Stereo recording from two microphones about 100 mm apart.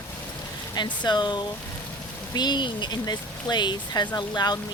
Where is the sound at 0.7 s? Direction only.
45° left (ahead or behind).